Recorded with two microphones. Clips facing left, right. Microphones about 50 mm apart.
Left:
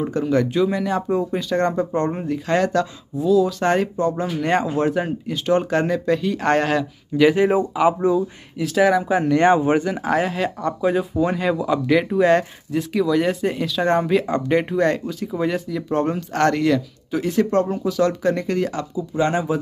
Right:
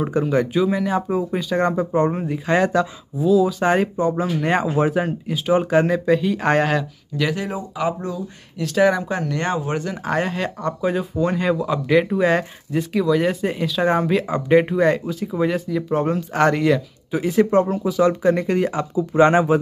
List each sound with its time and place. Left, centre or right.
0.0 s speech: centre
7.2 s speech: centre
8.5 s speech: centre
9.3 s speech: centre
9.8 s speech: centre
18.9 s speech: right